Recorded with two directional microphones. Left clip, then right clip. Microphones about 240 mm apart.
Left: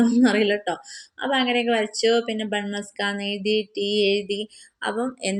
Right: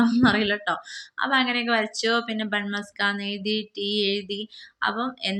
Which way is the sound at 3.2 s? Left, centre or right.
Right.